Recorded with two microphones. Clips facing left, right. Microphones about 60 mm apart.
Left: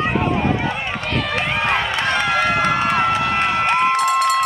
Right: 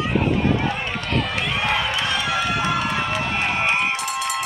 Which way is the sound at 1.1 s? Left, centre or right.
Left.